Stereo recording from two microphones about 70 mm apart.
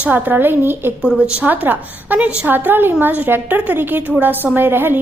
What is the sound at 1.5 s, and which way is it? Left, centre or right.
A woman's voice, right.